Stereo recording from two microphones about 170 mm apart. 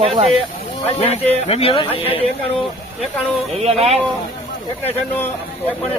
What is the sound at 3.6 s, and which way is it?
Speech, 40° right (ahead or behind).